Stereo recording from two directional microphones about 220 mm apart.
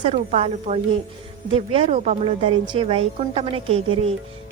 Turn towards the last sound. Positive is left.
turn(degrees=-25)  # may be behind; listen again after turning